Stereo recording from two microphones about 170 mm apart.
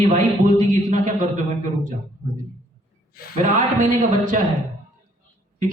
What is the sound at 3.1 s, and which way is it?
Speech, 60° left (ahead or behind).